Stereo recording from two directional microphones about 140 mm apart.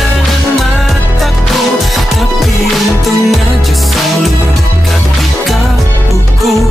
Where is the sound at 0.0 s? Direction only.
Centre (ahead or behind).